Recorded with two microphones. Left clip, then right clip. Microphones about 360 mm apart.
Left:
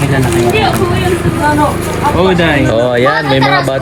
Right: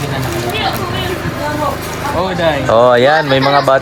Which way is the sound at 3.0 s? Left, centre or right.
Right.